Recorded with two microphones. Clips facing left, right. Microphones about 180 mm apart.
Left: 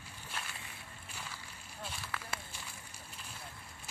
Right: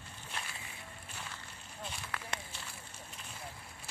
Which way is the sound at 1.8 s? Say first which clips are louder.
Even; 5° left (ahead or behind).